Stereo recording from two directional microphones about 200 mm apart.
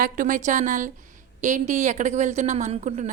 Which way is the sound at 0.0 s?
40° right (ahead or behind).